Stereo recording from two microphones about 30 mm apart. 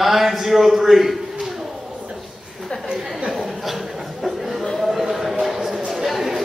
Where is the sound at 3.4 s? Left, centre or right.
Centre.